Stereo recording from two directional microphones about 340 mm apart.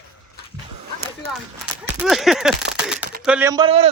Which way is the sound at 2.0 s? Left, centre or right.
Centre.